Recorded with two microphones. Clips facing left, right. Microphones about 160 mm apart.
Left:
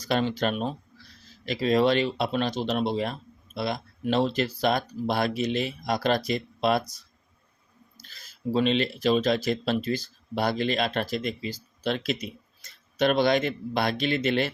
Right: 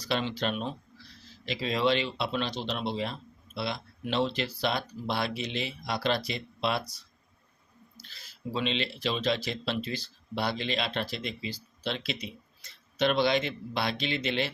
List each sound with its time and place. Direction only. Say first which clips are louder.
0.0 s speech: left 5 dB; 45° left (ahead or behind)